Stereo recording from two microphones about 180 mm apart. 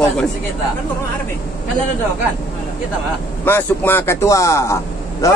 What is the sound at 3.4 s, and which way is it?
A man's voice, 10° left (ahead or behind).